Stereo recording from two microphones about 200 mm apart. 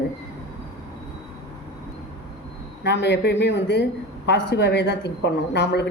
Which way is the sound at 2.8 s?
60° left (ahead or behind).